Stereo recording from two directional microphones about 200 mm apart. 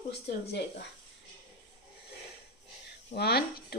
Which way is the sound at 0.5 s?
55° left (ahead or behind).